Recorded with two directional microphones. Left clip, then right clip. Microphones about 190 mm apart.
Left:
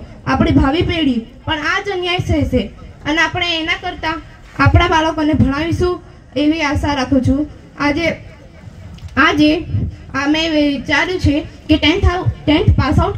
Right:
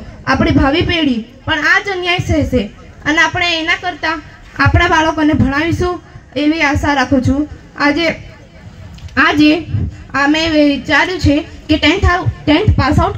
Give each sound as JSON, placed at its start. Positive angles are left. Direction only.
{"t": 0.2, "sound": "a woman's voice", "side_deg": -35}
{"t": 9.1, "sound": "a woman's voice", "side_deg": -40}